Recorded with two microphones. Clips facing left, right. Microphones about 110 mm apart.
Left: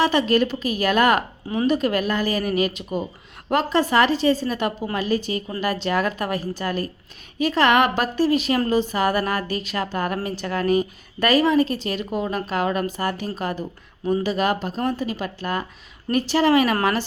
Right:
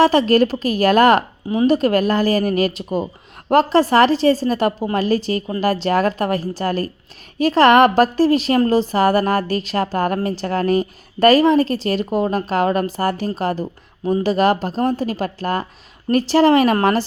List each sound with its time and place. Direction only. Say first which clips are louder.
0.0 s a woman's voice: right 5 dB; 35° right (ahead or behind)